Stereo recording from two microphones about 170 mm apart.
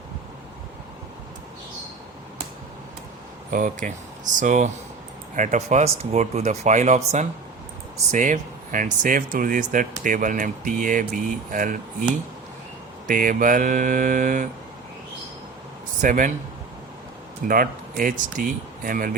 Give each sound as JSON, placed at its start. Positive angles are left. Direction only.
{"t": 3.5, "sound": "speech", "side_deg": -50}
{"t": 13.1, "sound": "speech", "side_deg": -55}
{"t": 16.0, "sound": "speech", "side_deg": -50}
{"t": 17.5, "sound": "speech", "side_deg": -55}